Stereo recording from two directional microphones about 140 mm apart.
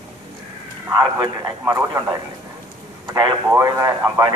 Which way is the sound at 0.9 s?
25° right (ahead or behind).